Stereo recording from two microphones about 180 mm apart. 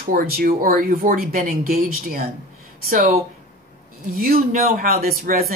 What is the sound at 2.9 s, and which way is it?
Speech, 50° right (ahead or behind).